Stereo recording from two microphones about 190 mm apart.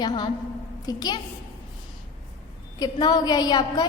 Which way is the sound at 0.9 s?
20° left (ahead or behind).